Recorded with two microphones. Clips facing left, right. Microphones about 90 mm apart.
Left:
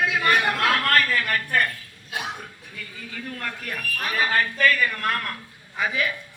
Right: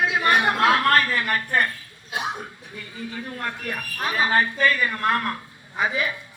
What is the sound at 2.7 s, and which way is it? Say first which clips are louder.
A man's voice: right 4 dB; 25° right (ahead or behind).